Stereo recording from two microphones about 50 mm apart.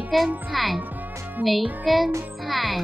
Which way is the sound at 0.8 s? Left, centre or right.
Right.